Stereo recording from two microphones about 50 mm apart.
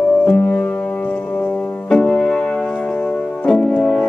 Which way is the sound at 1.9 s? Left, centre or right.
Centre.